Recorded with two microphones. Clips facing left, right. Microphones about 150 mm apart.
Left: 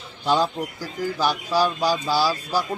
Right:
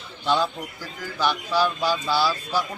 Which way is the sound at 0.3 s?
40° left (ahead or behind).